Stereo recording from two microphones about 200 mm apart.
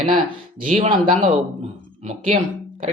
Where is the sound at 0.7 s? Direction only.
40° right (ahead or behind).